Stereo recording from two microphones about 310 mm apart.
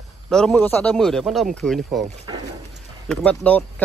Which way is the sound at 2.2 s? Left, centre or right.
Centre.